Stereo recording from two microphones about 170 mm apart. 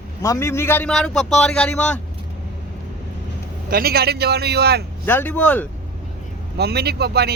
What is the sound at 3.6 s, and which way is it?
A man's voice, 60° right (ahead or behind).